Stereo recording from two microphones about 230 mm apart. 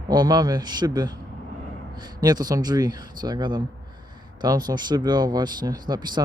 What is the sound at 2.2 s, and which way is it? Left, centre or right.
Speech, centre.